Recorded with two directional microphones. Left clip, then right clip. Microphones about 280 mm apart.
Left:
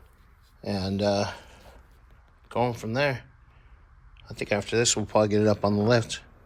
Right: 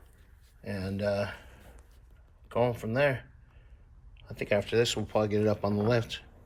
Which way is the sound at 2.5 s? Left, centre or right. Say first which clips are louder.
Left 1 dB; centre.